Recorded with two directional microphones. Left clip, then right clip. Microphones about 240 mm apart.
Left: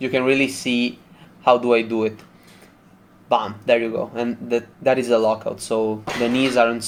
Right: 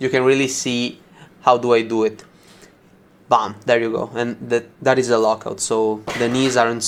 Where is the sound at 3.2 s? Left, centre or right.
Right.